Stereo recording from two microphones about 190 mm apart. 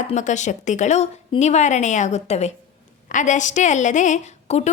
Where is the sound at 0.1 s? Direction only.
40° left (ahead or behind).